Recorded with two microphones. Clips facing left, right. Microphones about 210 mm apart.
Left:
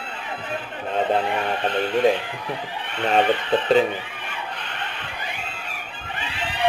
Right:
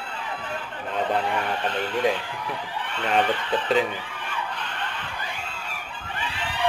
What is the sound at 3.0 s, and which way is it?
Speech, 20° left (ahead or behind).